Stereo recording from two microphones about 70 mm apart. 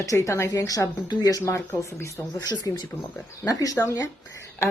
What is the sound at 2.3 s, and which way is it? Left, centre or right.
Speech, left.